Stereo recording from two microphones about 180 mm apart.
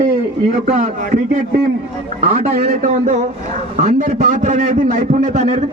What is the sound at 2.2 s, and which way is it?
A man's voice, 55° right (ahead or behind).